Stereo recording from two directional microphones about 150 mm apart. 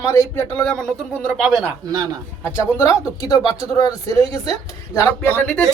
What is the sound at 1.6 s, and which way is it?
Speech, 25° right (ahead or behind).